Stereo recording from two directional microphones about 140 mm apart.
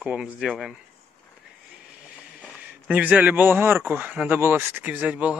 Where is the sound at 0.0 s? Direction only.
5° right (ahead or behind).